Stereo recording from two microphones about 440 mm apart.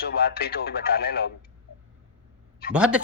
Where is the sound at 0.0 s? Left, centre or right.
Left.